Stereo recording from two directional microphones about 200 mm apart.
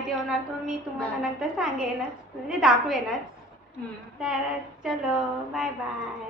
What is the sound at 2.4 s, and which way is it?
Speech, centre (ahead or behind).